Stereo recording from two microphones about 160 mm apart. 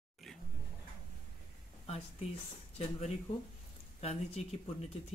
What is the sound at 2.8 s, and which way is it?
Speech, 45° left (ahead or behind).